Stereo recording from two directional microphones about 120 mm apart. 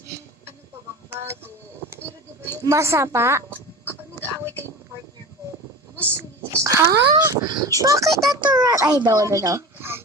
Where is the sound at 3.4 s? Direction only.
15° left (ahead or behind).